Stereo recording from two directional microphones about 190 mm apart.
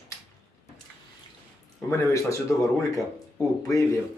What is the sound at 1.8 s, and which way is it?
Speech, 15° left (ahead or behind).